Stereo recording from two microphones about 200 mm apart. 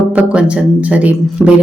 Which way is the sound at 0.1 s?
5° right (ahead or behind).